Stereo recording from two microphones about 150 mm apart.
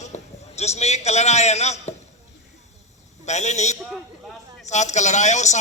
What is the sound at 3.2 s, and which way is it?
A man's voice, 50° left (ahead or behind).